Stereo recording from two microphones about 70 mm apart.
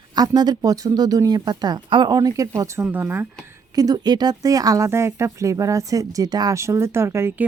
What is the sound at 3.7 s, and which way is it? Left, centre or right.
Speech, right.